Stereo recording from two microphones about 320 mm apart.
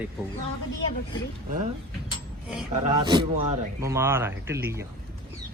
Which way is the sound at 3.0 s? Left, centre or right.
Centre.